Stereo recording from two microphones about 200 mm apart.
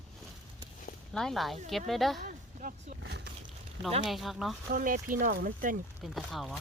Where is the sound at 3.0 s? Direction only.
60° right (ahead or behind).